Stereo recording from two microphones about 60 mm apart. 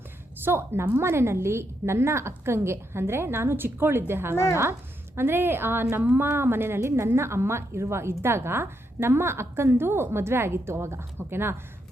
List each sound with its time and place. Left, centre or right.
0.4 s a woman's voice: right
6.0 s a woman's voice: right
6.2 s a woman's voice: right